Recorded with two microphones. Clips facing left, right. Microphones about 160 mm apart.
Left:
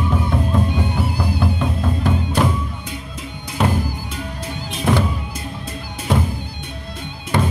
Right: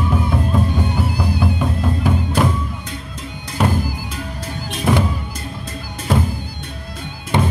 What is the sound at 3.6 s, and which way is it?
Music, centre (ahead or behind).